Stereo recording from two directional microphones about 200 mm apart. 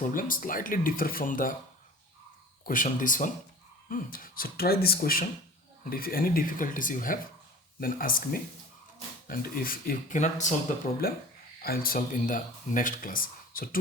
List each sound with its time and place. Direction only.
0.0 s speech: 45° left (ahead or behind)
2.6 s speech: 40° left (ahead or behind)